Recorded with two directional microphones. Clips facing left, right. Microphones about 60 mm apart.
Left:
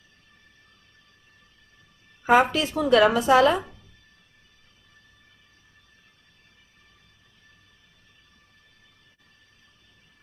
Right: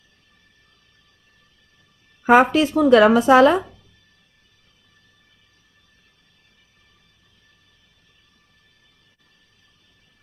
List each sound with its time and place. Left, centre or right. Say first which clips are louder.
2.4 s speech: right 7 dB; right